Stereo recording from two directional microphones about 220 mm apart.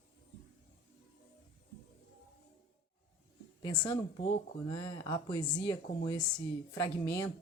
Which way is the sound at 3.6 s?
20° left (ahead or behind).